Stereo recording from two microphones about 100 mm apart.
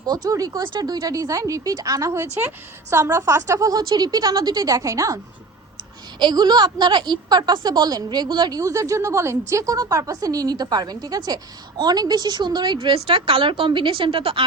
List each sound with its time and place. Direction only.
0.0 s a woman's voice: 40° right (ahead or behind)
0.6 s a woman's voice: 45° right (ahead or behind)
6.1 s a woman's voice: 45° right (ahead or behind); by 14.4 s 65° right (ahead or behind)